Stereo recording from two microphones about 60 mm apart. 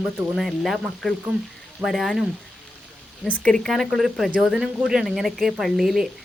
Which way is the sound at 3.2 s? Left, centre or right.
Left.